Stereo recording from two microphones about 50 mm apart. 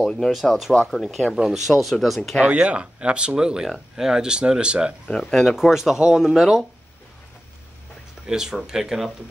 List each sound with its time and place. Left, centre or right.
0.3 s speech: centre
2.4 s speech: right
5.3 s speech: centre
5.7 s speech: centre
8.3 s speech: centre